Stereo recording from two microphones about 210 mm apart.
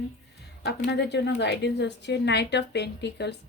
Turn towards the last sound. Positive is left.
turn(degrees=55)  # may be behind; listen again after turning